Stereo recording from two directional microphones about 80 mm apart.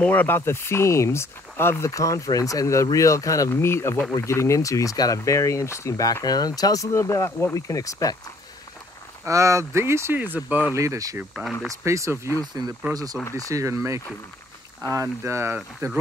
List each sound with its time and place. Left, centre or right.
0.0 s speech: left
1.9 s speech: left
3.5 s speech: left
6.2 s speech: left
6.9 s speech: left
9.2 s speech: right
10.7 s speech: right
12.9 s speech: right